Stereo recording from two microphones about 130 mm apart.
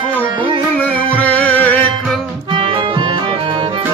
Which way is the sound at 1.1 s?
10° left (ahead or behind).